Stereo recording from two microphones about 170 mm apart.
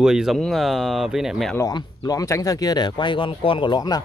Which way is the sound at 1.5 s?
20° left (ahead or behind).